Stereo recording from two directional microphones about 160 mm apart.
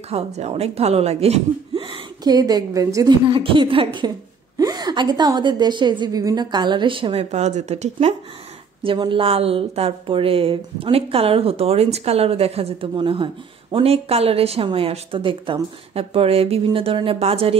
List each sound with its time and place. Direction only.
0.1 s a woman's voice: 40° right (ahead or behind)
8.8 s a woman's voice: 30° right (ahead or behind)